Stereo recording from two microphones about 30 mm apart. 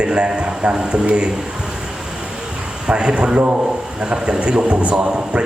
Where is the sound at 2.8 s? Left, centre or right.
Right.